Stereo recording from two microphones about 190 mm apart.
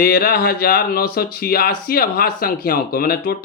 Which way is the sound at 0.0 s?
50° left (ahead or behind).